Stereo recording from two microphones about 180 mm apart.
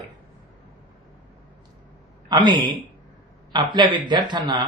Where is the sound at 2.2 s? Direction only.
25° right (ahead or behind).